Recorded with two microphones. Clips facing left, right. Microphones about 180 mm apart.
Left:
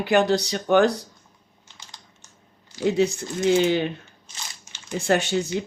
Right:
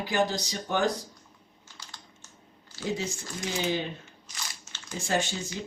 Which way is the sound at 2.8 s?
70° left (ahead or behind).